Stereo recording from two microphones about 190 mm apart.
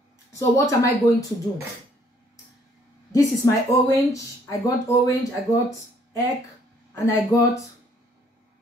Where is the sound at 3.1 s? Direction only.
15° left (ahead or behind).